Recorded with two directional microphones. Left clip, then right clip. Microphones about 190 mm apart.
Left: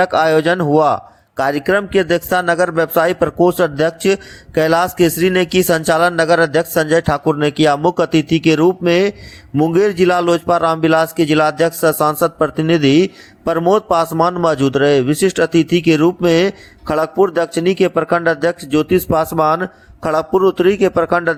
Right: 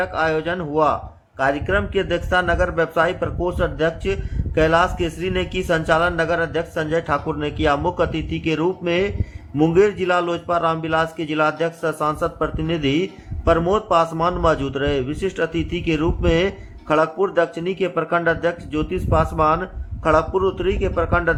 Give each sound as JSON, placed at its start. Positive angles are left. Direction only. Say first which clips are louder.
{"t": 0.0, "sound": "a man's voice", "louder": "left 8 dB", "side_deg": 35}